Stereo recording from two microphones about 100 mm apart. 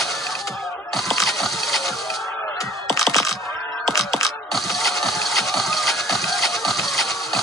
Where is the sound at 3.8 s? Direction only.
Centre (ahead or behind).